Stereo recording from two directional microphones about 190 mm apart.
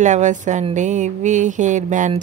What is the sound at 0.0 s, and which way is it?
Speech, 40° right (ahead or behind).